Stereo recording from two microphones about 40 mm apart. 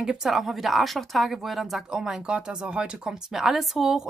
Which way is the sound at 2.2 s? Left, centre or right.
Right.